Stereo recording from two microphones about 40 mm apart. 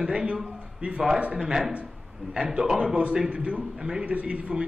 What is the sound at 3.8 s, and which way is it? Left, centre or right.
Speech, centre.